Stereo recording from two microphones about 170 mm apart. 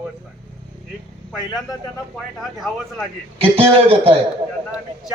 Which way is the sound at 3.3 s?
30° right (ahead or behind).